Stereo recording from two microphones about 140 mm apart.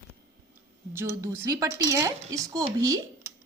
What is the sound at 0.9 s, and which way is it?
Speech, 20° right (ahead or behind).